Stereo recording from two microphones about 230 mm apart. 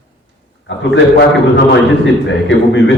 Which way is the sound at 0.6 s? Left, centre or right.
Left.